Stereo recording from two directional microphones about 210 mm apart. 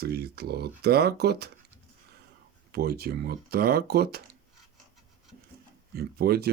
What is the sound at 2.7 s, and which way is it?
Speech, 45° right (ahead or behind).